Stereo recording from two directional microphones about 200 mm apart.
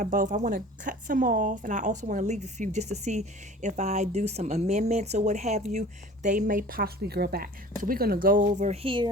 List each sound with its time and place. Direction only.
0.0 s a woman's voice: 45° right (ahead or behind); by 9.0 s 25° right (ahead or behind)